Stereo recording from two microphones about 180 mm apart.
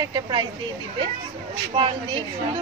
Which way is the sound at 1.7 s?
30° right (ahead or behind).